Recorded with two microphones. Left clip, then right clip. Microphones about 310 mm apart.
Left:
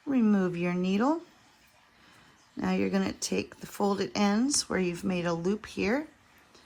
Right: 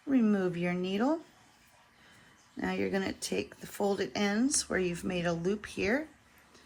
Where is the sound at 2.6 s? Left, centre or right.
Centre.